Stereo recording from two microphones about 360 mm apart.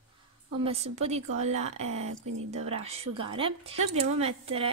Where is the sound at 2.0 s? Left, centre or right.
Right.